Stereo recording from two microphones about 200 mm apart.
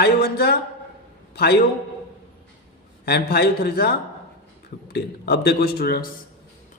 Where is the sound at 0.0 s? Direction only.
55° left (ahead or behind).